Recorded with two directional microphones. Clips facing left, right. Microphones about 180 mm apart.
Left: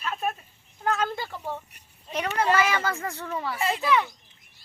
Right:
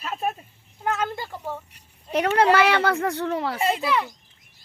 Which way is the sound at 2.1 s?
70° right (ahead or behind).